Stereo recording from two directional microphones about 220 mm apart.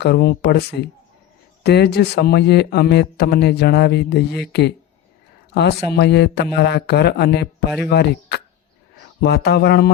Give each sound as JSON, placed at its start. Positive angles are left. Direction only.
{"t": 0.0, "sound": "speech", "side_deg": 45}